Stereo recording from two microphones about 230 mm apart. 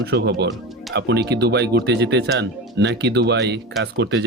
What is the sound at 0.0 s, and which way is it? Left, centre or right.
Speech, right.